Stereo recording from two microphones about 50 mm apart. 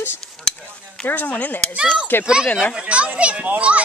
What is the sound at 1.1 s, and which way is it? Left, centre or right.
Speech, left.